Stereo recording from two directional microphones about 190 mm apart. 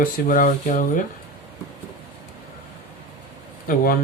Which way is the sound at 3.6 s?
50° left (ahead or behind).